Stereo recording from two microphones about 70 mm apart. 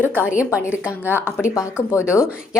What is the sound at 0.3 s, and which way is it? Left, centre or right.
Speech, centre.